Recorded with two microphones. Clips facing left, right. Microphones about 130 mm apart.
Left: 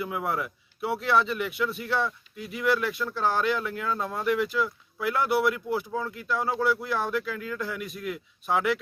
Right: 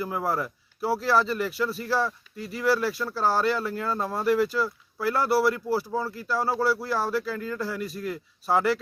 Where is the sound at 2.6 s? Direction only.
35° right (ahead or behind).